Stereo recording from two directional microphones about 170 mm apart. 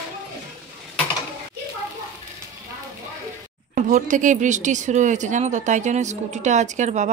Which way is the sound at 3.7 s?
45° right (ahead or behind).